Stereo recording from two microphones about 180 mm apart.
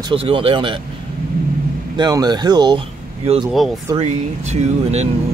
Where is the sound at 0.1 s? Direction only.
30° right (ahead or behind).